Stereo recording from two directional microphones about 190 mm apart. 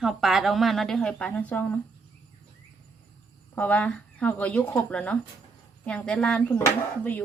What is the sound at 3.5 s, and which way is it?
A woman's voice, 5° left (ahead or behind).